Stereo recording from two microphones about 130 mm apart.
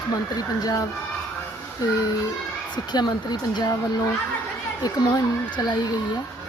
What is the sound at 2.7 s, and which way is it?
Speech, 35° left (ahead or behind).